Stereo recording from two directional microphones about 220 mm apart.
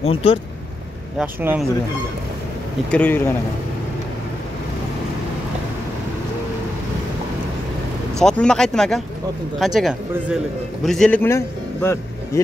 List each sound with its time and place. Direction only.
0.0 s speech: 25° left (ahead or behind)
1.1 s speech: 10° right (ahead or behind)
2.9 s speech: 10° left (ahead or behind)
8.2 s a man's voice: 5° left (ahead or behind)